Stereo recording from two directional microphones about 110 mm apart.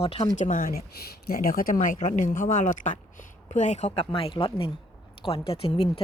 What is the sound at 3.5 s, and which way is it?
Speech, 90° left.